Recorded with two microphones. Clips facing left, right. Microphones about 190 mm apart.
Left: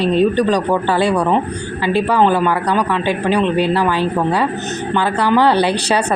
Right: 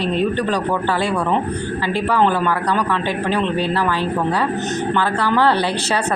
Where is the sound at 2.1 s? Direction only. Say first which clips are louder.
Left 2 dB; 15° left (ahead or behind).